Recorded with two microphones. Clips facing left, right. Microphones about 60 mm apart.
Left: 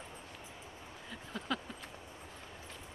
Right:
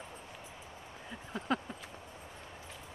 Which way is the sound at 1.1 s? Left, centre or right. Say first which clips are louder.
Right 2 dB; right.